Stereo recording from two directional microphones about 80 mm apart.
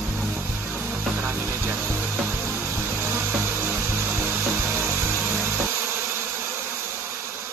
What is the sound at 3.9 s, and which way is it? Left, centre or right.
Music, right.